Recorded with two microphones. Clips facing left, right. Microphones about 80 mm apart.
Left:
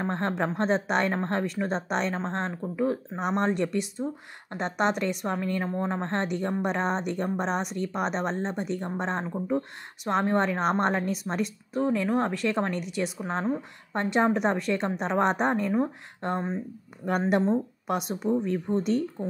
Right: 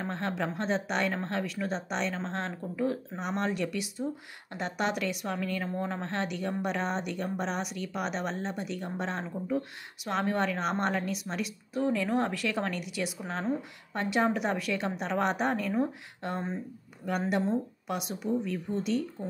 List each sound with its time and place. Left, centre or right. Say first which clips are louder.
0.1 s speech: left 4 dB; left
2.2 s speech: left 4 dB; left
2.7 s speech: left 3 dB; centre
3.2 s speech: left 6 dB; left
11.9 s speech: left 3 dB; centre
12.4 s a woman's voice: left 4 dB; left